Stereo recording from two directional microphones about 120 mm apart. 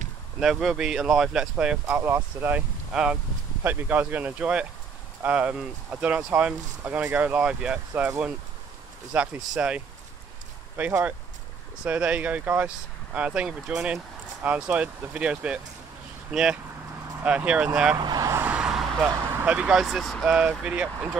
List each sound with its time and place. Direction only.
0.4 s speech: 5° right (ahead or behind)
2.0 s speech: 20° right (ahead or behind)
2.9 s speech: 5° right (ahead or behind)
9.1 s speech: 10° right (ahead or behind)
17.9 s speech: 35° right (ahead or behind)
18.3 s vehicle: 15° right (ahead or behind)
19.4 s speech: 10° right (ahead or behind)